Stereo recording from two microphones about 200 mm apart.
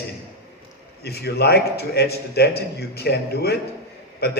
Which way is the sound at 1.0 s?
55° left (ahead or behind).